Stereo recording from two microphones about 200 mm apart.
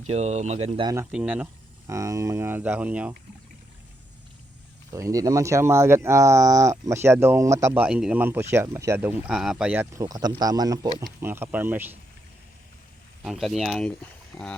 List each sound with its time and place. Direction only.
0.1 s speech: 35° right (ahead or behind)
0.9 s speech: 5° right (ahead or behind)
4.9 s speech: 15° right (ahead or behind)
13.2 s speech: centre (ahead or behind)